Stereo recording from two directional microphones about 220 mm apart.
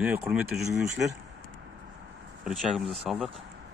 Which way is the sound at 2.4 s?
Centre (ahead or behind).